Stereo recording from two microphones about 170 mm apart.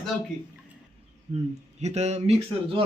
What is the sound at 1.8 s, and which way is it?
Speech, 40° right (ahead or behind).